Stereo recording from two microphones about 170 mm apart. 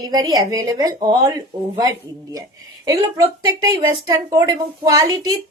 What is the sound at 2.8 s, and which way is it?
A woman's voice, 20° right (ahead or behind).